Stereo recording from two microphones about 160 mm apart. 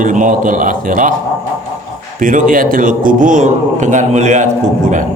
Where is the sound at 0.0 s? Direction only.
55° right (ahead or behind).